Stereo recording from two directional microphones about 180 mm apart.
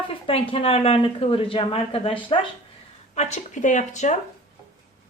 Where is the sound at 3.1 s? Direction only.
40° left (ahead or behind).